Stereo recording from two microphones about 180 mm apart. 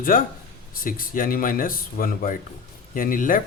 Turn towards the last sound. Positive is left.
turn(degrees=50)  # may be behind; listen again after turning